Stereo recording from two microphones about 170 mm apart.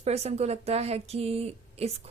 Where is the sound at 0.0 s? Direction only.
40° right (ahead or behind).